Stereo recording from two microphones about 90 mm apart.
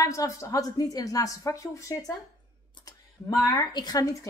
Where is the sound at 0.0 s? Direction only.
40° left (ahead or behind).